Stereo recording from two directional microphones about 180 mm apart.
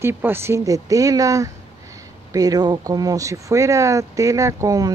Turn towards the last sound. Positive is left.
turn(degrees=-20)  # may be behind; listen again after turning